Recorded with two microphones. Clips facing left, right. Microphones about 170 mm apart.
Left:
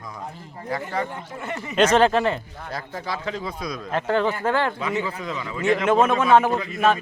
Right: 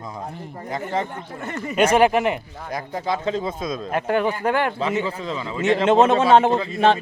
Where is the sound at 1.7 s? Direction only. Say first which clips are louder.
Right 1 dB; 10° right (ahead or behind).